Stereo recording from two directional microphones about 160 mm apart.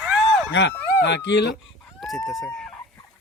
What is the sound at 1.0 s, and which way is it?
Speech, 90° left.